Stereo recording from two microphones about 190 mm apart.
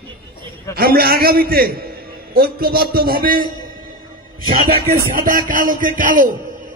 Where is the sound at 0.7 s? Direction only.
55° right (ahead or behind).